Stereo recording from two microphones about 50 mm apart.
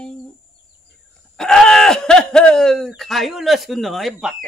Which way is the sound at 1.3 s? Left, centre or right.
Centre.